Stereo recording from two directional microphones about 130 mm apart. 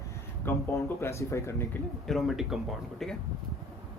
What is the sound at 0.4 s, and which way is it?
Speech, 15° left (ahead or behind).